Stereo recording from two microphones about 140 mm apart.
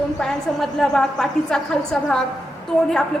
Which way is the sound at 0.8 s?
5° left (ahead or behind).